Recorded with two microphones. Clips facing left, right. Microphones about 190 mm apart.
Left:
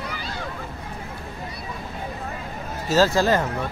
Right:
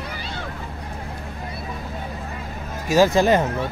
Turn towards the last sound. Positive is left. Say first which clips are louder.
# right 3 dB
turn(degrees=-20)  # may be behind; listen again after turning